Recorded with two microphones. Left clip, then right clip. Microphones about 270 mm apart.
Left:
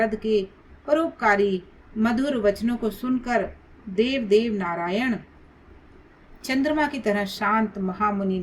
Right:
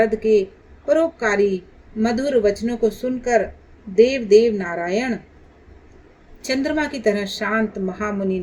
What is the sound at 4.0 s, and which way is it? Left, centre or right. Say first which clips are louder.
Speech: right 8 dB; left.